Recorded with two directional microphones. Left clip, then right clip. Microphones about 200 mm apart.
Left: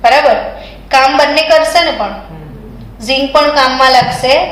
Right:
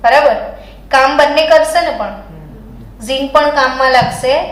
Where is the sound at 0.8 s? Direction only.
20° right (ahead or behind).